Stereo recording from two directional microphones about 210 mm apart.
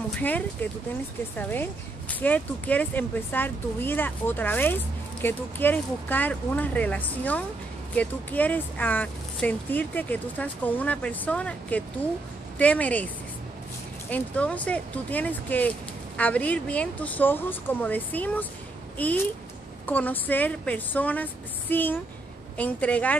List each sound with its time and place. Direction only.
0.1 s speech: 5° left (ahead or behind)